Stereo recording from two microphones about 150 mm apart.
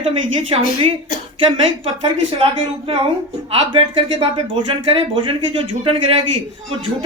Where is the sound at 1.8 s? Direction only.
35° right (ahead or behind).